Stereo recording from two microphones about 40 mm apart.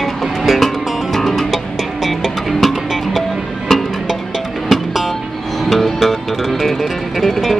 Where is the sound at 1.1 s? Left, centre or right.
Centre.